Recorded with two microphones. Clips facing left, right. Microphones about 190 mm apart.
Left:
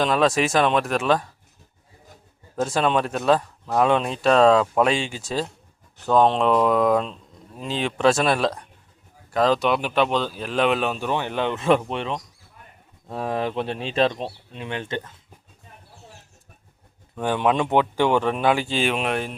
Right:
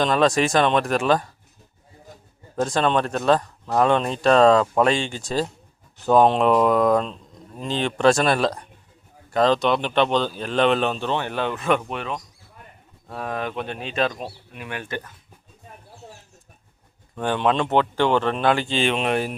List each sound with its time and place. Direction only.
0.0 s speech: 5° left (ahead or behind)
2.6 s speech: 5° left (ahead or behind); by 15.2 s 25° left (ahead or behind)
17.2 s speech: 10° left (ahead or behind)